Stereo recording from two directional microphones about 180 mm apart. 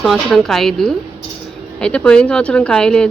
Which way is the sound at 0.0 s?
Centre (ahead or behind).